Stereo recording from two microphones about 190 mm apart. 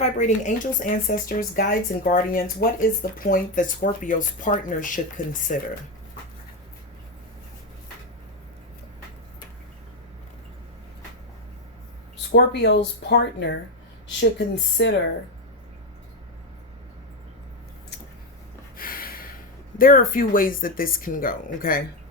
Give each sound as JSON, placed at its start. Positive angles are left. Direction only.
{"t": 0.0, "sound": "speech", "side_deg": 40}
{"t": 12.3, "sound": "speech", "side_deg": 65}
{"t": 18.8, "sound": "a sound", "side_deg": 50}
{"t": 19.8, "sound": "speech", "side_deg": 50}